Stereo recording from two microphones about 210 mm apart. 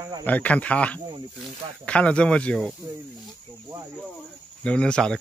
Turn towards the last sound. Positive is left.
turn(degrees=5)  # may be behind; listen again after turning